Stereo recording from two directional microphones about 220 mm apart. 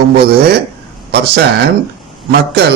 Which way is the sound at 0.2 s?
45° right (ahead or behind).